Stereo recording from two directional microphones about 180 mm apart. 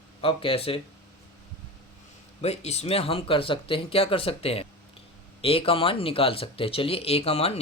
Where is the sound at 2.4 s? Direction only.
35° left (ahead or behind).